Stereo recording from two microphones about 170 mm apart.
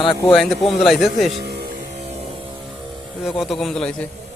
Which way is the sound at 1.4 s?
65° right (ahead or behind).